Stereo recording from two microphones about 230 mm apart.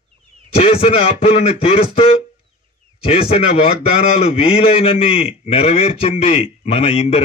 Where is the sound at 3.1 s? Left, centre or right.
Left.